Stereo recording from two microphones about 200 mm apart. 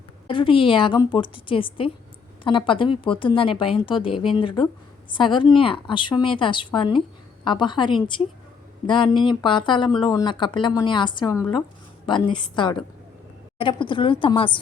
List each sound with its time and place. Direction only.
0.3 s speech: 25° left (ahead or behind)